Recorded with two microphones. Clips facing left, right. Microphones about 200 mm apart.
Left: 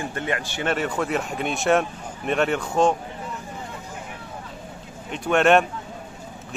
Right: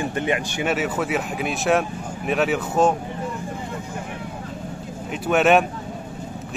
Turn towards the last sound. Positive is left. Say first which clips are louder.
# right 1 dB
turn(degrees=-5)  # may be behind; listen again after turning